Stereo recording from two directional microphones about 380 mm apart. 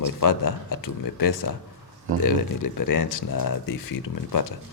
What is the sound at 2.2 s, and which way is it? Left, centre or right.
Speech, left.